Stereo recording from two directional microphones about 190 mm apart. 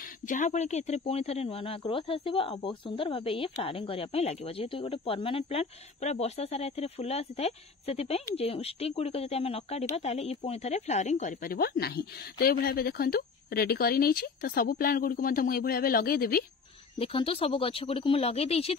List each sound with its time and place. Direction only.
0.3 s speech: 40° left (ahead or behind)
17.0 s speech: 30° left (ahead or behind)